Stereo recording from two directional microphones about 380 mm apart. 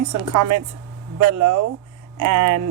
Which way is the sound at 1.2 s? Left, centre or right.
Right.